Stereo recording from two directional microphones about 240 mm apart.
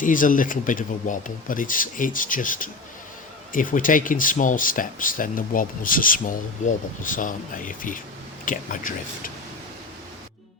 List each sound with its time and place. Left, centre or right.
0.0 s speech: left